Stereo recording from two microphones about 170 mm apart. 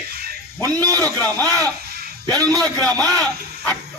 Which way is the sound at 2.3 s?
20° right (ahead or behind).